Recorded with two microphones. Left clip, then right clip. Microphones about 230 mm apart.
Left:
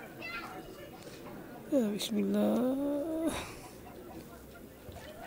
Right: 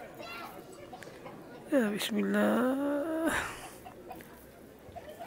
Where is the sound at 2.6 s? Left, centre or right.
Right.